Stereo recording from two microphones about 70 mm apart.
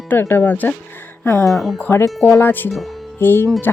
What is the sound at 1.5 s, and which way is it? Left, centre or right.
Speech, centre.